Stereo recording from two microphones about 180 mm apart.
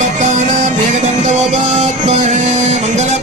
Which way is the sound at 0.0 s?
40° right (ahead or behind).